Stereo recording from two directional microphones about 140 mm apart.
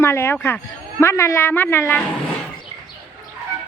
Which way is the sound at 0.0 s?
15° left (ahead or behind).